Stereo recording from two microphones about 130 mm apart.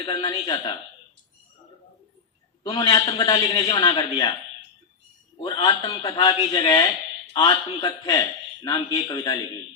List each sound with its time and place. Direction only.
0.0 s a man's voice: 35° left (ahead or behind)
2.6 s a man's voice: 30° left (ahead or behind)
5.4 s a man's voice: 35° left (ahead or behind)